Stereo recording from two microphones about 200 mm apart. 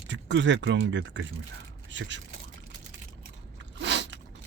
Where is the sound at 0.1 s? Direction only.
65° right (ahead or behind).